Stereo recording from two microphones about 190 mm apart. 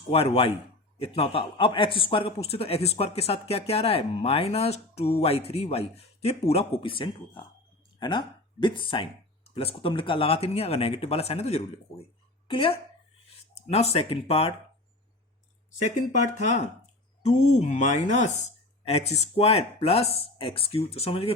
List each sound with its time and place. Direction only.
0.1 s a man's voice: 30° left (ahead or behind)
15.8 s a man's voice: 40° left (ahead or behind)